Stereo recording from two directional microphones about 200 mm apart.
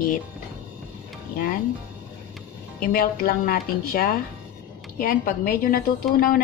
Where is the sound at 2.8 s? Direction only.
45° left (ahead or behind).